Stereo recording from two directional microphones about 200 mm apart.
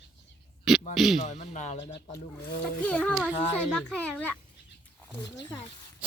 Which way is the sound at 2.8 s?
5° left (ahead or behind).